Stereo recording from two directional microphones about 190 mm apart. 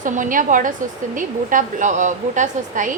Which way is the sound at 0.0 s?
45° right (ahead or behind).